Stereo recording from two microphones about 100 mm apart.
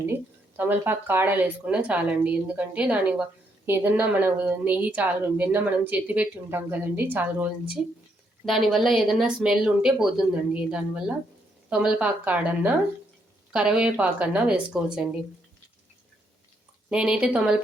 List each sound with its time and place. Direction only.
0.1 s a woman's voice: 20° right (ahead or behind)
8.4 s speech: centre (ahead or behind)
16.9 s speech: 10° right (ahead or behind)